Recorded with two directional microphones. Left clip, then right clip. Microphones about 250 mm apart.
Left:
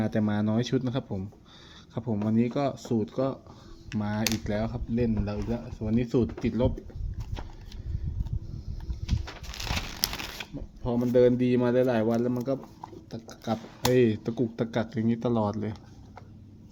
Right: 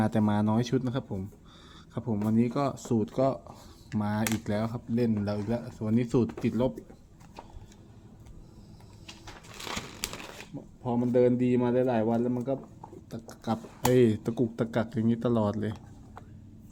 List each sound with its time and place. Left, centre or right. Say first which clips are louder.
0.0 s speech: right 1 dB; centre
9.7 s a sound: left 7 dB; left
10.8 s speech: left 3 dB; centre
13.1 s speech: left 1 dB; centre